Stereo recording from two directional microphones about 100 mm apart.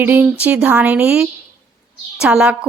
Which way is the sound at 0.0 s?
15° right (ahead or behind).